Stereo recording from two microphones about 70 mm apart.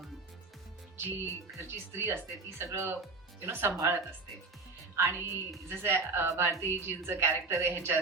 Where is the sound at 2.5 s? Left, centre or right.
Right.